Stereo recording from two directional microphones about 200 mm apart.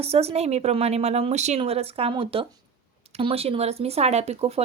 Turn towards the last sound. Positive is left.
turn(degrees=-30)  # may be behind; listen again after turning